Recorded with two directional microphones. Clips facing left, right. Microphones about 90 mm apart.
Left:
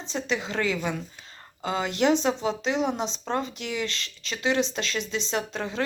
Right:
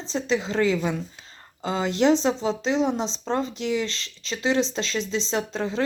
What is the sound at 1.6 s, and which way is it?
Speech, 25° right (ahead or behind).